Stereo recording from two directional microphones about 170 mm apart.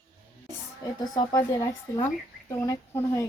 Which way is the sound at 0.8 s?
25° left (ahead or behind).